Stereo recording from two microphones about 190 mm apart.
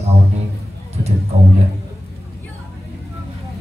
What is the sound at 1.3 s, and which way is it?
Speech, 35° right (ahead or behind).